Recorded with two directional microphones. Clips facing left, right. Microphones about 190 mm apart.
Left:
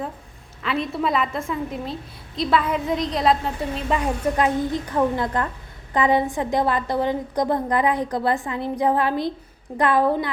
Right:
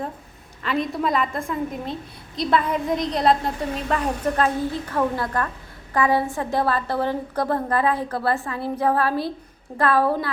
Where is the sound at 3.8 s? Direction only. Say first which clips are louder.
Left 2 dB; 10° left (ahead or behind).